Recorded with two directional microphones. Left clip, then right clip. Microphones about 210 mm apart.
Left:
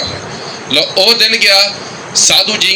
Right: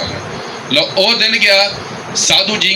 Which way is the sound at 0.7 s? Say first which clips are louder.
Left 2 dB; 55° left (ahead or behind).